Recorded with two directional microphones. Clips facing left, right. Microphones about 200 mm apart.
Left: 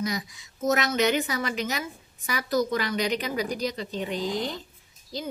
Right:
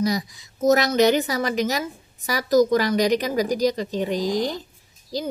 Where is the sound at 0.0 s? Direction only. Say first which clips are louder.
Right 7 dB; 35° right (ahead or behind).